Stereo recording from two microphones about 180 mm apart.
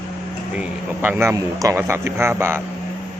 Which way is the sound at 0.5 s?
10° right (ahead or behind).